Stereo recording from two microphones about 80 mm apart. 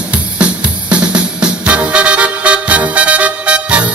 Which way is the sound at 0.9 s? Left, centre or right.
Centre.